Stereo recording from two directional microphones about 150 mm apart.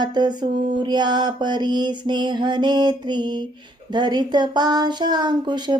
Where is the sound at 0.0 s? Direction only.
30° right (ahead or behind).